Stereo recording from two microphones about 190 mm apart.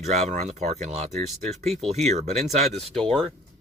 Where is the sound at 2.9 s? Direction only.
5° left (ahead or behind).